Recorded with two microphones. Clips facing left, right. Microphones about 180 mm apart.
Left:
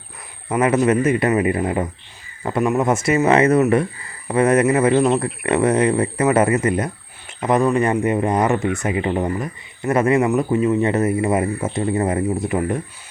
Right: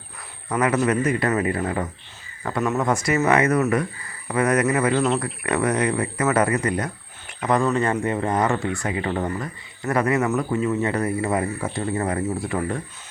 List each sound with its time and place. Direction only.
0.4 s speech: 25° left (ahead or behind)